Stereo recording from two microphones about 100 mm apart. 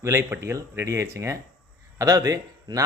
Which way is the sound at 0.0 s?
25° right (ahead or behind).